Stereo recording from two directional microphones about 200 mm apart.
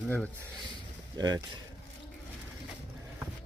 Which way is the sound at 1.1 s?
20° right (ahead or behind).